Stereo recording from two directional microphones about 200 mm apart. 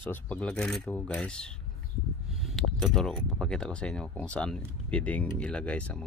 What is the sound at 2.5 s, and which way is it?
Speech, centre (ahead or behind).